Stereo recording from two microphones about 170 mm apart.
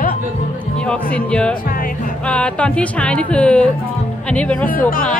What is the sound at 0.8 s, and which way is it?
A woman's voice, 5° left (ahead or behind).